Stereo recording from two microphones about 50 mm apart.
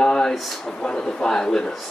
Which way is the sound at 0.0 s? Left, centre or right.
Centre.